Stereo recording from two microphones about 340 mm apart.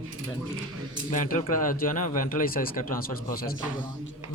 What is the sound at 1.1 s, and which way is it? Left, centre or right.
A man's voice, left.